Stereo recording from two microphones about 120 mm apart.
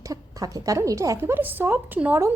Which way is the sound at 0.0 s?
30° right (ahead or behind).